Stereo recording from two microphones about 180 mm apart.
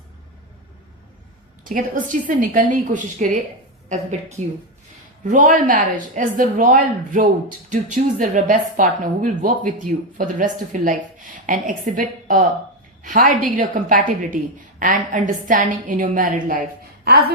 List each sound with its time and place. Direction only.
2.2 s a woman's voice: 50° right (ahead or behind)